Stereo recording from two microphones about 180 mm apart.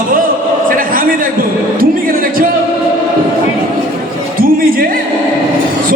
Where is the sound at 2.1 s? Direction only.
55° right (ahead or behind).